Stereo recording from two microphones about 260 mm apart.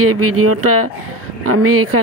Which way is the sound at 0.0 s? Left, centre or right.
Right.